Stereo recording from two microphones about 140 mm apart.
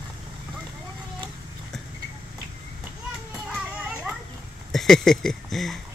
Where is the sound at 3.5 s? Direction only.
10° right (ahead or behind).